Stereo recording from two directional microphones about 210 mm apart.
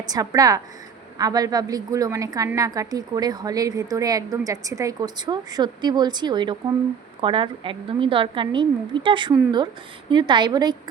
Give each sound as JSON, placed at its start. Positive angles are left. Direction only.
{"t": 0.1, "sound": "a woman's voice", "side_deg": -15}